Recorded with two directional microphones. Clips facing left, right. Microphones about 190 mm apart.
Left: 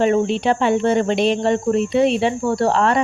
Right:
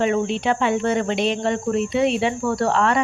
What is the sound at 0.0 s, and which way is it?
A woman's voice, 35° left (ahead or behind).